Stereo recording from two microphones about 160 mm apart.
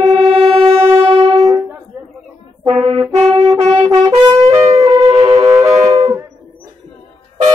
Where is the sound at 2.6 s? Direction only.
35° right (ahead or behind).